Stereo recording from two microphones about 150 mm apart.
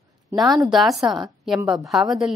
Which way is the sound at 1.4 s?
5° right (ahead or behind).